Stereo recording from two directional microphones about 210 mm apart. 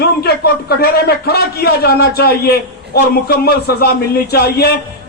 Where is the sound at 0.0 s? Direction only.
50° left (ahead or behind).